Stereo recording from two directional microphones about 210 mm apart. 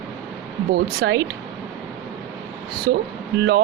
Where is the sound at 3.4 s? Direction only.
55° right (ahead or behind).